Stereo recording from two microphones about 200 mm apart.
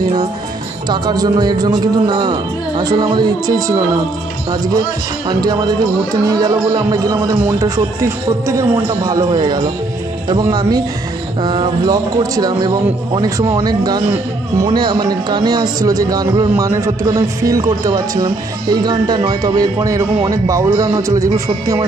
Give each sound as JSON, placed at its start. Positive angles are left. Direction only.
{"t": 0.8, "sound": "a man's voice", "side_deg": -20}
{"t": 5.4, "sound": "a man's voice", "side_deg": -20}
{"t": 6.2, "sound": "music", "side_deg": -20}
{"t": 10.3, "sound": "a man's voice", "side_deg": -20}
{"t": 20.2, "sound": "music", "side_deg": -15}